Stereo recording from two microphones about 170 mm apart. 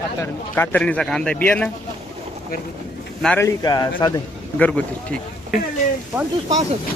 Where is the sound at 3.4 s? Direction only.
20° left (ahead or behind).